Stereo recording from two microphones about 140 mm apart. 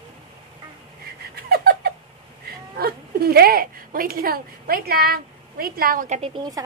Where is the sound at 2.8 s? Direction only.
90° right.